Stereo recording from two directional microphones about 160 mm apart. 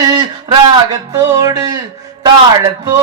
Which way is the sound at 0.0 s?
25° right (ahead or behind).